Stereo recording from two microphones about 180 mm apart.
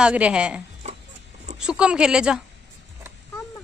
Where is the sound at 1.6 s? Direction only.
5° right (ahead or behind).